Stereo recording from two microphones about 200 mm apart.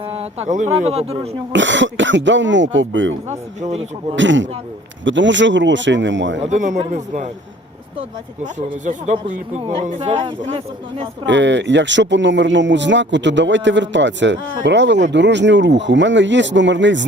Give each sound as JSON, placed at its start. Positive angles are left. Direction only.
{"t": 0.0, "sound": "speech", "side_deg": -30}
{"t": 1.5, "sound": "speech", "side_deg": -65}
{"t": 3.2, "sound": "speech", "side_deg": -35}
{"t": 4.1, "sound": "speech", "side_deg": -65}
{"t": 6.4, "sound": "speech", "side_deg": -35}
{"t": 8.5, "sound": "speech", "side_deg": -40}
{"t": 11.3, "sound": "speech", "side_deg": -65}